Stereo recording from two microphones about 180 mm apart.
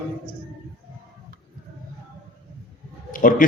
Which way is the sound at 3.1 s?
50° left (ahead or behind).